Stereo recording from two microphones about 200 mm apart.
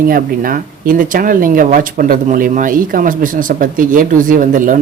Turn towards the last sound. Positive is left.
turn(degrees=-40)  # may be behind; listen again after turning